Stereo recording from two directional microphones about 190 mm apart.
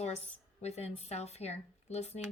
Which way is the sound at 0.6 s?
35° left (ahead or behind).